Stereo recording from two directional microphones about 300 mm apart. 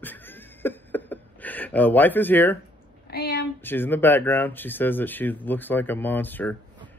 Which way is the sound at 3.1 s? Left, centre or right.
Left.